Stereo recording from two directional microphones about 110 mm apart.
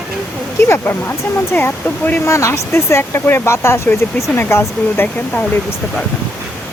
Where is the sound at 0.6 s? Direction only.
20° left (ahead or behind).